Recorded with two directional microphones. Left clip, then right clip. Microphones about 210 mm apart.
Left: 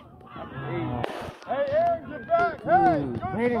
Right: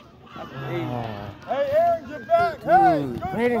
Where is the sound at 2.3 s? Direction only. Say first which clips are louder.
Right 3 dB; 65° right (ahead or behind).